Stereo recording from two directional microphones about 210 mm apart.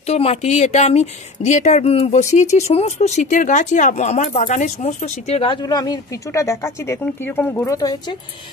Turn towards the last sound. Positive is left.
turn(degrees=15)  # may be behind; listen again after turning